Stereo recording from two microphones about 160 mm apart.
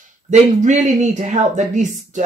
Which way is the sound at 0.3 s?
50° right (ahead or behind).